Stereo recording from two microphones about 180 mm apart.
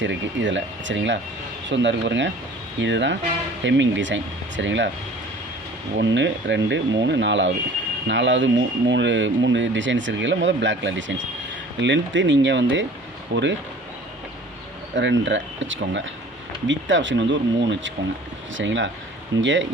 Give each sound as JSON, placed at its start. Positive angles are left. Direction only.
{"t": 0.0, "sound": "speech", "side_deg": -90}
{"t": 6.0, "sound": "speech", "side_deg": -90}
{"t": 14.9, "sound": "speech", "side_deg": -85}